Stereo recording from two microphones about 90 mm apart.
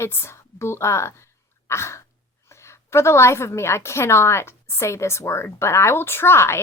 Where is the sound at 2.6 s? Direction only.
30° left (ahead or behind).